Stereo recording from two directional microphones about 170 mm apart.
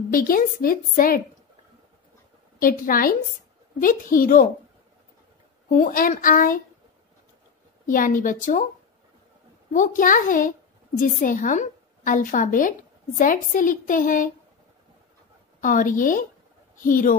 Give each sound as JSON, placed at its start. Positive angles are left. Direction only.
{"t": 0.1, "sound": "a woman's voice", "side_deg": 60}
{"t": 2.6, "sound": "a woman's voice", "side_deg": 55}
{"t": 5.7, "sound": "a woman's voice", "side_deg": 55}
{"t": 7.8, "sound": "a woman's voice", "side_deg": 50}
{"t": 9.7, "sound": "a woman's voice", "side_deg": 50}
{"t": 15.6, "sound": "a woman's voice", "side_deg": 50}